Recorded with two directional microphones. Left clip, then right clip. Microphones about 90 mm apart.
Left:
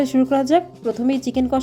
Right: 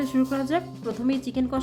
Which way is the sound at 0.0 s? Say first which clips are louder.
Left 8 dB; 50° left (ahead or behind).